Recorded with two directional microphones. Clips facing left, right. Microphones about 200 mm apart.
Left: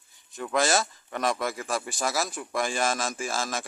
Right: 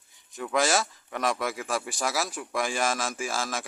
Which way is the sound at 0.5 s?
10° right (ahead or behind).